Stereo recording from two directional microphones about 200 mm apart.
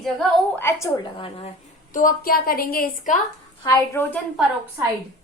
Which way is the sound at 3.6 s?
15° left (ahead or behind).